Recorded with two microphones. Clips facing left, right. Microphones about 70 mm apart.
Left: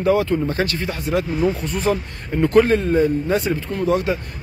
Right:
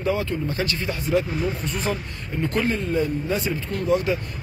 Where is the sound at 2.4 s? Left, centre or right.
Left.